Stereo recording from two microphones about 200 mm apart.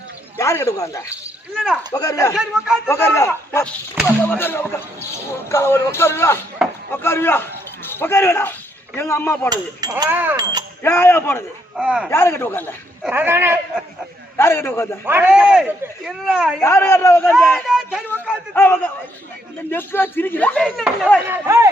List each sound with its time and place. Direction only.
0.3 s speech: 15° left (ahead or behind)
1.5 s a man's voice: centre (ahead or behind)
1.9 s speech: 15° left (ahead or behind)
9.5 s speech: 20° right (ahead or behind)
10.8 s speech: 10° left (ahead or behind)
11.8 s a man's voice: 5° right (ahead or behind)
12.1 s speech: 10° left (ahead or behind)
13.0 s speech: 10° right (ahead or behind)
14.3 s speech: 10° left (ahead or behind)
15.0 s a man's voice: 10° right (ahead or behind)
16.6 s a man's voice: 10° left (ahead or behind)
18.5 s a man's voice: 10° left (ahead or behind)
21.2 s speech: 15° right (ahead or behind)